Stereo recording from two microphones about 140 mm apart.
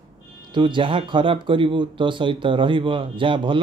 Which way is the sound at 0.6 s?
35° right (ahead or behind).